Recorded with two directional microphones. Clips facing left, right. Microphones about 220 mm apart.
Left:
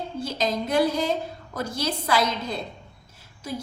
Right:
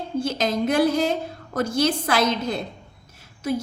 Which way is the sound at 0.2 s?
85° right.